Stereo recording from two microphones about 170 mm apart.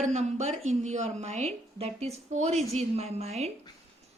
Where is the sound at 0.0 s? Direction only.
40° right (ahead or behind).